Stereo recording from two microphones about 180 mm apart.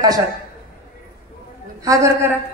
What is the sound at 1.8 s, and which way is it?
Speech, 15° right (ahead or behind).